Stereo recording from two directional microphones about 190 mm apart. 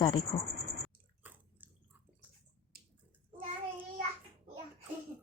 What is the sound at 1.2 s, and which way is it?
Chewing, 10° right (ahead or behind).